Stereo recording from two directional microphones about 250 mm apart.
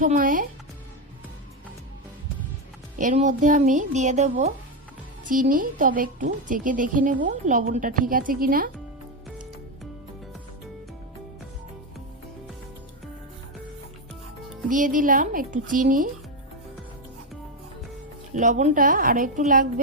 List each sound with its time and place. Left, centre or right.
0.0 s a woman's voice: right
3.0 s a woman's voice: right
14.7 s a woman's voice: right
18.3 s a woman's voice: right